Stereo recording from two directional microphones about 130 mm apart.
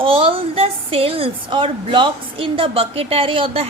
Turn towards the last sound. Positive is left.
turn(degrees=-45)  # may be behind; listen again after turning